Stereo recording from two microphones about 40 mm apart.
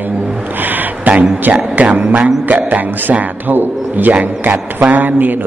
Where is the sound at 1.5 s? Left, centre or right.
Right.